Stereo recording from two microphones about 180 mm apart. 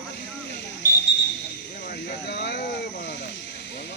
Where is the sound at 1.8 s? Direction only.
65° left (ahead or behind).